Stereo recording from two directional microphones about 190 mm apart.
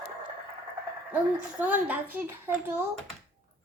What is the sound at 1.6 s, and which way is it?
A woman's voice, 10° right (ahead or behind).